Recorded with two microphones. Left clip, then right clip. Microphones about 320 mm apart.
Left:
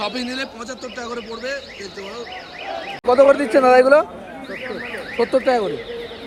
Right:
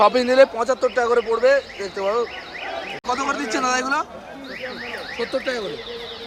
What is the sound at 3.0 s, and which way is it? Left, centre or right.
Speech, centre.